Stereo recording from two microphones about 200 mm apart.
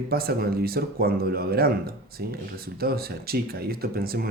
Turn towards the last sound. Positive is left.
turn(degrees=-50)  # may be behind; listen again after turning